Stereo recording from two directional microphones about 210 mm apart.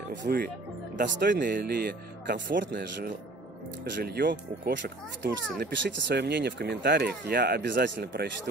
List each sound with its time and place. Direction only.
0.1 s speech: 50° right (ahead or behind)
0.9 s speech: 40° right (ahead or behind)
1.3 s speech: 55° right (ahead or behind)